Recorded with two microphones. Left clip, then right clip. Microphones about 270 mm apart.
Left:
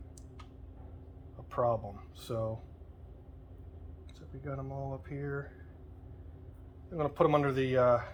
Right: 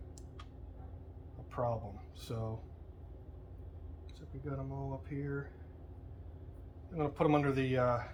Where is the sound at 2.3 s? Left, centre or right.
Centre.